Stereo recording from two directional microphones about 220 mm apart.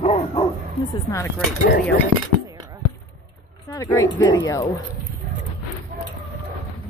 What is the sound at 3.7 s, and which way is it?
Speech, 15° left (ahead or behind).